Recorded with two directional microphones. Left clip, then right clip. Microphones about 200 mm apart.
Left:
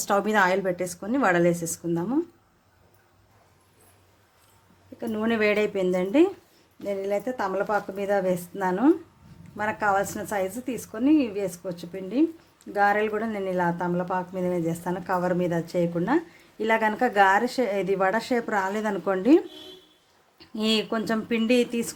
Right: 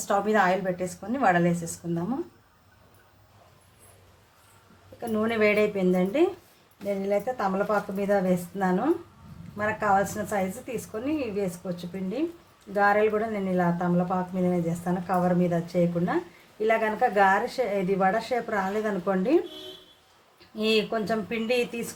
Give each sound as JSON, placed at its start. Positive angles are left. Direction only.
{"t": 0.0, "sound": "speech", "side_deg": 50}
{"t": 4.9, "sound": "speech", "side_deg": 45}
{"t": 20.6, "sound": "speech", "side_deg": 50}